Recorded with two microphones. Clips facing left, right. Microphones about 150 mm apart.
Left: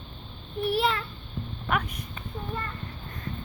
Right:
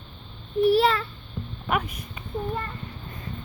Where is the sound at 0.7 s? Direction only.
40° right (ahead or behind).